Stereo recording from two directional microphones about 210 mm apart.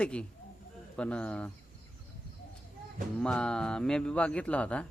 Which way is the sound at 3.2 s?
5° left (ahead or behind).